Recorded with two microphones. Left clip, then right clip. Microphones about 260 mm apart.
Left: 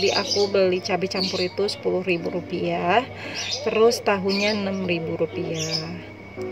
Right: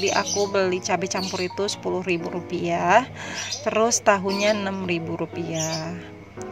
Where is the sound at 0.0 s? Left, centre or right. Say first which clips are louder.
Left 1 dB; right.